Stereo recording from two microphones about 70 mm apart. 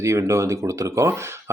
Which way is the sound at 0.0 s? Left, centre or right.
Right.